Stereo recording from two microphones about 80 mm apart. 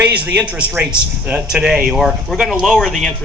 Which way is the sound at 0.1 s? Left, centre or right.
Centre.